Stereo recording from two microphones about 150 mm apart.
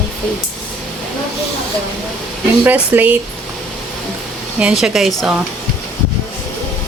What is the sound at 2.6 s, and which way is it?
Speech, 10° right (ahead or behind).